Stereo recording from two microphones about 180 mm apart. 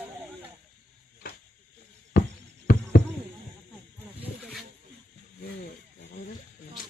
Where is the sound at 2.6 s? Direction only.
50° left (ahead or behind).